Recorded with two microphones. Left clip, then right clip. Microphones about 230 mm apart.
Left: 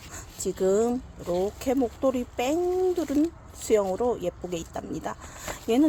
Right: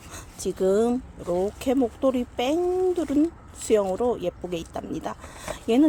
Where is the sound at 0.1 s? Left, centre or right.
Centre.